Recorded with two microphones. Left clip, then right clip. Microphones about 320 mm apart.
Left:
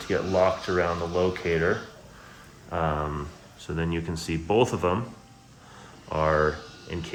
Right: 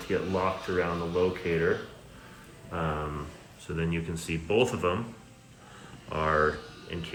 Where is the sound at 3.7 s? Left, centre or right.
Centre.